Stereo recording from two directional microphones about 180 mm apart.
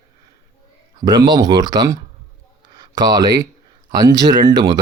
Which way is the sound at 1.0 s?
25° right (ahead or behind).